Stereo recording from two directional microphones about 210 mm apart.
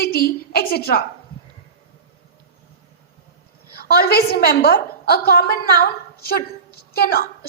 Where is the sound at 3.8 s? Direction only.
45° left (ahead or behind).